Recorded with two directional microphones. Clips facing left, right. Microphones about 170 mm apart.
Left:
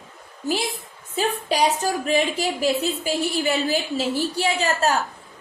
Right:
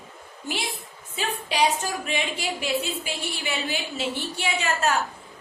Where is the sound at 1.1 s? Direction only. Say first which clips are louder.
Left 4 dB; 40° left (ahead or behind).